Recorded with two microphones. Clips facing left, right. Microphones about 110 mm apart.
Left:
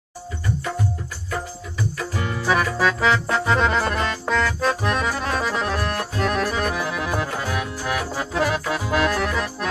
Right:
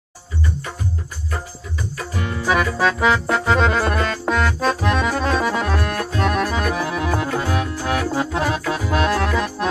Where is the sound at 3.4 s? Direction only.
35° right (ahead or behind).